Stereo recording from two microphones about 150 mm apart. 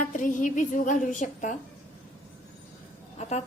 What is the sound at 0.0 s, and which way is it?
A woman's voice, 60° left (ahead or behind).